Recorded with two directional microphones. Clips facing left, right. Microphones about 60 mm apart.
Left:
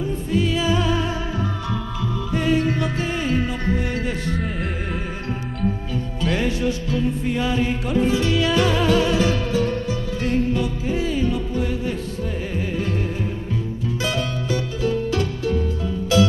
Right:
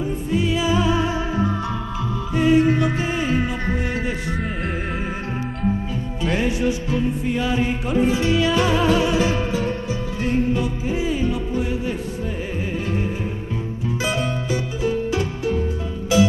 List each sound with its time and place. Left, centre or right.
0.0 s music: centre
6.2 s music: right